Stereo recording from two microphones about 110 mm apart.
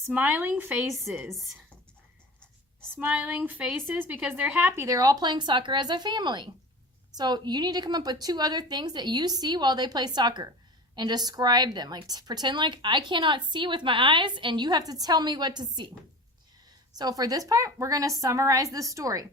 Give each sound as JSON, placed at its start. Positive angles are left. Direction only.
{"t": 0.0, "sound": "speech", "side_deg": -15}
{"t": 2.9, "sound": "a woman's voice", "side_deg": -20}
{"t": 16.9, "sound": "a woman's voice", "side_deg": -35}